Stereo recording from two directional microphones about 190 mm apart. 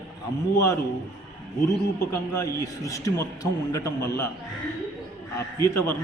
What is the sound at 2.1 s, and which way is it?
A man's voice, 15° left (ahead or behind).